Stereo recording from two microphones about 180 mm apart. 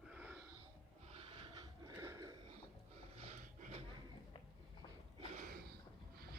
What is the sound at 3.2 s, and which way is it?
Snort, 40° right (ahead or behind).